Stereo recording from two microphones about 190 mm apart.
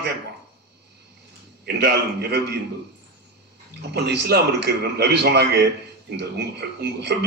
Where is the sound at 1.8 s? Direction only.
60° right (ahead or behind).